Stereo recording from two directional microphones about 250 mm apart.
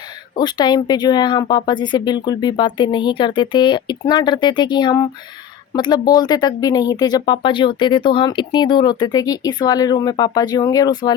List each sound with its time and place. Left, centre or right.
0.3 s speech: centre